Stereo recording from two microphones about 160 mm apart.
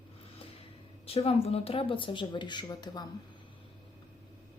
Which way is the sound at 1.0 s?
35° left (ahead or behind).